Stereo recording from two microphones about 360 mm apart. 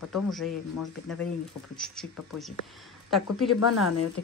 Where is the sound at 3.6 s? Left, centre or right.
Left.